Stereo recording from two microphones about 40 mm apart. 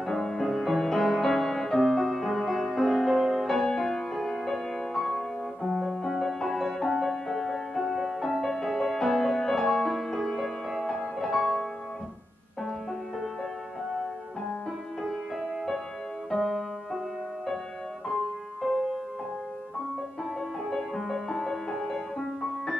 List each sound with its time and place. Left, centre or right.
0.0 s music: centre
5.7 s music: centre
16.3 s music: centre
20.7 s music: centre